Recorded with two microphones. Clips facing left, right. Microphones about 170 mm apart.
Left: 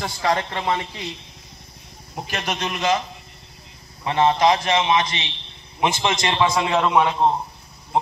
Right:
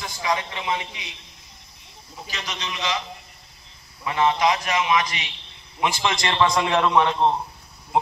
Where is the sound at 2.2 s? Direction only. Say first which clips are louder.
Left 7 dB; 55° left (ahead or behind).